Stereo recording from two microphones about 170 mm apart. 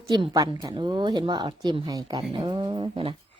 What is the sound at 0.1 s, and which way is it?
A woman's voice, 25° right (ahead or behind).